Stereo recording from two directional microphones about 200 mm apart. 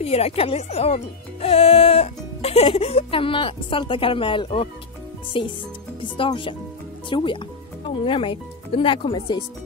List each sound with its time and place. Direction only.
0.0 s speech: 30° left (ahead or behind)